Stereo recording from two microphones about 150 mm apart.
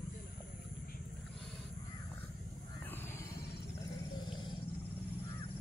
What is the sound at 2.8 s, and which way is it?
Wild animals, 15° left (ahead or behind).